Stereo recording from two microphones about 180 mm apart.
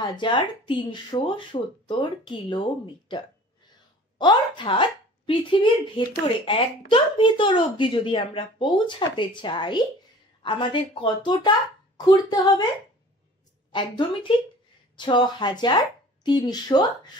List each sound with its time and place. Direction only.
0.0 s speech: 25° left (ahead or behind)
13.7 s speech: 25° left (ahead or behind)